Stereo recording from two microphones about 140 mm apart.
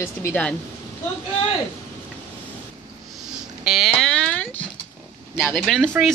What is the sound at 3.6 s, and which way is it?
Dog, 5° right (ahead or behind).